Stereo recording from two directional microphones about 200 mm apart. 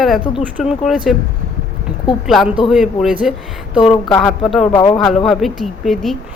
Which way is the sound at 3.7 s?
25° left (ahead or behind).